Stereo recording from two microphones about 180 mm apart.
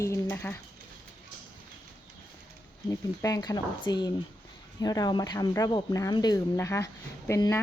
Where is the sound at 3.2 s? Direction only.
20° left (ahead or behind).